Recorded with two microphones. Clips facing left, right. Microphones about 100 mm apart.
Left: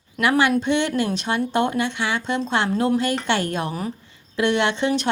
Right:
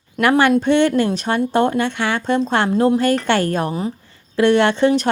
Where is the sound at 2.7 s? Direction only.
30° right (ahead or behind).